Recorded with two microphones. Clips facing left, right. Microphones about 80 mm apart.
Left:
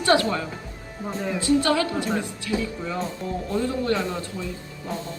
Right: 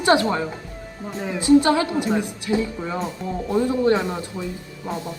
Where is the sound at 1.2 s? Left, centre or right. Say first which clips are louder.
Right 1 dB; centre.